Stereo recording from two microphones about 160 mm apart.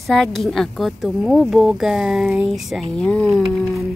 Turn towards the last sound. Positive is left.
turn(degrees=0)  # may be behind; listen again after turning